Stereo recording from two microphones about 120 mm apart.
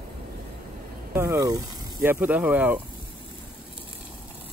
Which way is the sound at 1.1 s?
25° right (ahead or behind).